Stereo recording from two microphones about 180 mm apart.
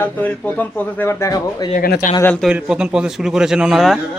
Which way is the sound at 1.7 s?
50° left (ahead or behind).